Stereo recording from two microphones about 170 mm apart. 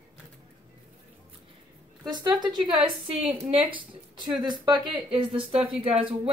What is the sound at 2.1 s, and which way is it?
A woman's voice, 25° right (ahead or behind).